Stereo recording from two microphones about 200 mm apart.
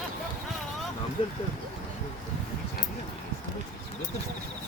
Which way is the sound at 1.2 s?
30° left (ahead or behind).